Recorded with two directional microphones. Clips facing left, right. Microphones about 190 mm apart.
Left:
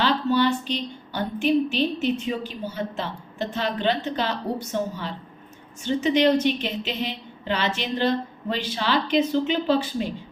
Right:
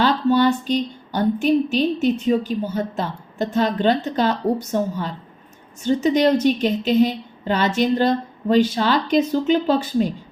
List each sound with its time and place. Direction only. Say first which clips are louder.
0.0 s speech: right 4 dB; 45° right (ahead or behind)